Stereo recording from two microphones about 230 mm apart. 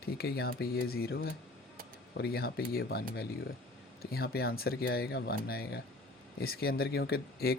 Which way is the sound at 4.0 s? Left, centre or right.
Left.